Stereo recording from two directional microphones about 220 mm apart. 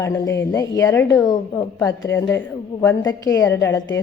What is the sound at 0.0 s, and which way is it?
A woman's voice, 10° left (ahead or behind).